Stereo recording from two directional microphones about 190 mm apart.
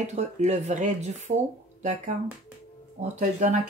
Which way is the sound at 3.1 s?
40° right (ahead or behind).